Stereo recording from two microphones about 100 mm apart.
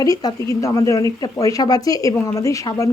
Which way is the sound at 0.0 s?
40° left (ahead or behind).